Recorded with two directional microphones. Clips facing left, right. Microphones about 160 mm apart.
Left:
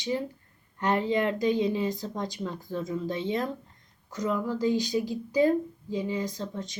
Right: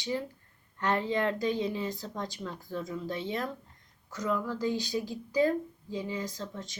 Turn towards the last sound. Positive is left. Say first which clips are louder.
# left 5 dB
turn(degrees=20)  # may be behind; listen again after turning